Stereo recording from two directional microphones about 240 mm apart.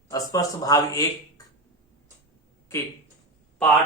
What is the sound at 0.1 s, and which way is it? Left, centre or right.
Speech, centre.